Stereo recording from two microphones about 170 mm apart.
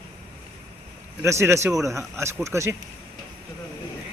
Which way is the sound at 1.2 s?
15° right (ahead or behind).